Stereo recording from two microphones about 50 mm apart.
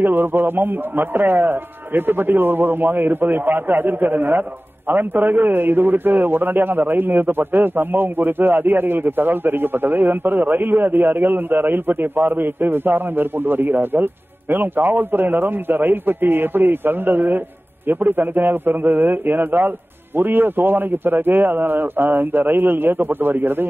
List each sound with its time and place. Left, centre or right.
0.0 s a man's voice: right